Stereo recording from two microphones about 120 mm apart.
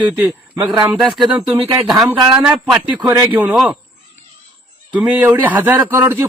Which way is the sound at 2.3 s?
10° right (ahead or behind).